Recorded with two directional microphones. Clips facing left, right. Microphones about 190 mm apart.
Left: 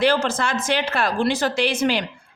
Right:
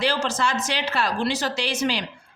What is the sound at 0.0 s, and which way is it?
A woman's voice, 55° left (ahead or behind).